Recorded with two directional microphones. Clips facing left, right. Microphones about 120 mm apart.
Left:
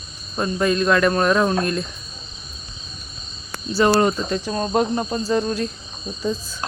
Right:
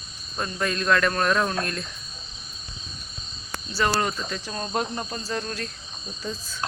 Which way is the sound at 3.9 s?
25° left (ahead or behind).